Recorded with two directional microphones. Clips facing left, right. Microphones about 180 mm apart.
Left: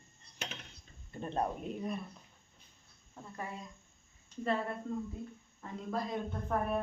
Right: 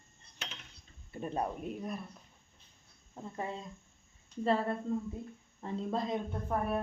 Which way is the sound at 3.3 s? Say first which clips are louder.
Right 4 dB; 25° right (ahead or behind).